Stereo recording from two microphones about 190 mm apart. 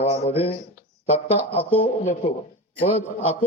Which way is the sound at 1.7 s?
35° left (ahead or behind).